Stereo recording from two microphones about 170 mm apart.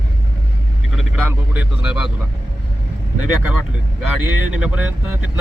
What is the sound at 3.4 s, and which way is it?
Speech, 10° right (ahead or behind).